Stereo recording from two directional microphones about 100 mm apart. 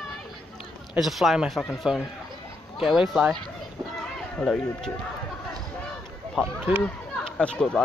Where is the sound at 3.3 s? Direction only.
5° left (ahead or behind).